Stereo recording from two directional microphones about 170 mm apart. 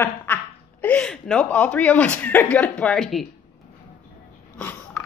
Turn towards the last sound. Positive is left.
turn(degrees=10)  # may be behind; listen again after turning